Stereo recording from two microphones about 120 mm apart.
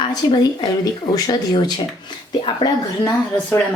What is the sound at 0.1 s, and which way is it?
Speech, 40° left (ahead or behind).